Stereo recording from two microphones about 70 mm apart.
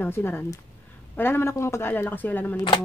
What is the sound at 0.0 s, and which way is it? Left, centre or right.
Speech, left.